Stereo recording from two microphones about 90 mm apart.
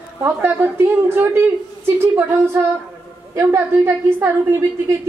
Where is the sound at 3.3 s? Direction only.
30° right (ahead or behind).